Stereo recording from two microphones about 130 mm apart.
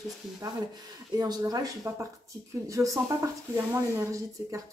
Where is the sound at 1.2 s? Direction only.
30° right (ahead or behind).